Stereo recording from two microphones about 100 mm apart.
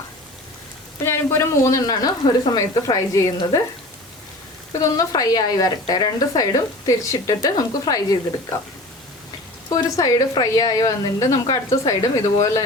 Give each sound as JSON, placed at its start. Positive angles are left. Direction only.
{"t": 1.0, "sound": "a woman's voice", "side_deg": 25}
{"t": 4.7, "sound": "a woman's voice", "side_deg": 35}
{"t": 9.6, "sound": "a woman's voice", "side_deg": 40}